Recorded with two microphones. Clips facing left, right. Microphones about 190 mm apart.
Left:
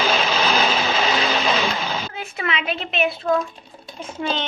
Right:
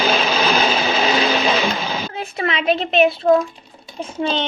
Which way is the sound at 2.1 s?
35° right (ahead or behind).